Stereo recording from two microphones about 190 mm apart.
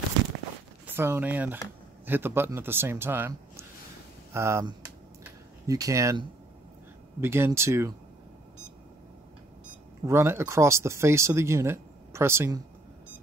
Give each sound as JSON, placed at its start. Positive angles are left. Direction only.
{"t": 0.9, "sound": "speech", "side_deg": -10}
{"t": 10.0, "sound": "speech", "side_deg": -15}